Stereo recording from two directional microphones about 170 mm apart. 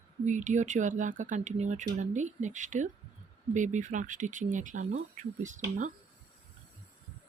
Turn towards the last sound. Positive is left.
turn(degrees=-50)  # may be behind; listen again after turning